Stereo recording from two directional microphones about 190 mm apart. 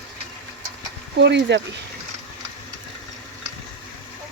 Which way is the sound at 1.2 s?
65° right (ahead or behind).